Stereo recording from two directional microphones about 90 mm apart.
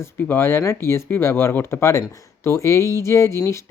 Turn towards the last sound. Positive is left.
turn(degrees=30)  # may be behind; listen again after turning